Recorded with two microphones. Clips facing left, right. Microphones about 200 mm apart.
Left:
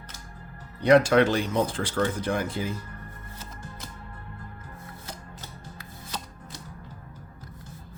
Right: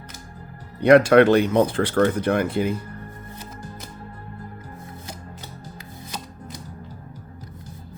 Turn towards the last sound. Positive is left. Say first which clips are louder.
# right 3 dB
turn(degrees=-15)  # may be behind; listen again after turning